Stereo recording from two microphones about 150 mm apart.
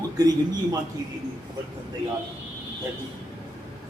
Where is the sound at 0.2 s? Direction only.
25° right (ahead or behind).